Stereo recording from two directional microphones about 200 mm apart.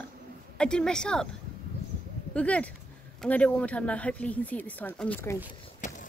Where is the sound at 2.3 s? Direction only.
5° left (ahead or behind).